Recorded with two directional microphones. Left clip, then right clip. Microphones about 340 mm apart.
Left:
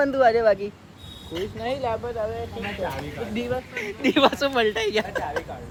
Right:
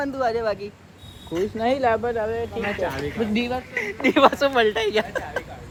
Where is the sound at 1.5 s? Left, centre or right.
Right.